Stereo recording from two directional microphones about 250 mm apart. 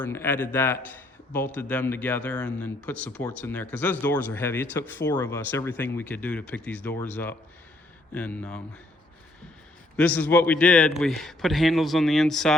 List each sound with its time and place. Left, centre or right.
0.0 s a man's voice: centre
10.0 s a man's voice: centre